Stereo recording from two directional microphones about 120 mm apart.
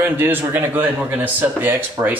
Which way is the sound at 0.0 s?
15° right (ahead or behind).